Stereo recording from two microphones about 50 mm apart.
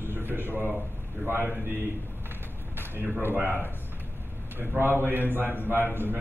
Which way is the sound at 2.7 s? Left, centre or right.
Right.